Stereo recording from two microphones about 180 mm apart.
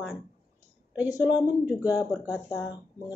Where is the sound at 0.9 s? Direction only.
10° right (ahead or behind).